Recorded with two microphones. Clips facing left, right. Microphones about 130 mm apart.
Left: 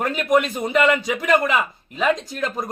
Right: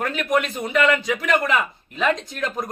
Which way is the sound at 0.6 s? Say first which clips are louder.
Left 2 dB; 30° left (ahead or behind).